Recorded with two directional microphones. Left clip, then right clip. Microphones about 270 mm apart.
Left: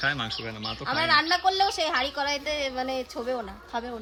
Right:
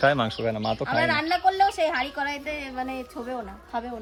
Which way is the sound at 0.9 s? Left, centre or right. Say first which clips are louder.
Left 2 dB; centre.